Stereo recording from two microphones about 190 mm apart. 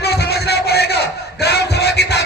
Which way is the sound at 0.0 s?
55° left (ahead or behind).